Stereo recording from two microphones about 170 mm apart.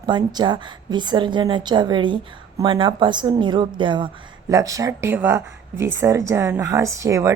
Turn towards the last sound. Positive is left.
turn(degrees=-20)  # may be behind; listen again after turning